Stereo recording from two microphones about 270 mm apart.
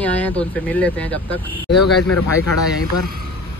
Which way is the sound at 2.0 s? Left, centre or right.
Left.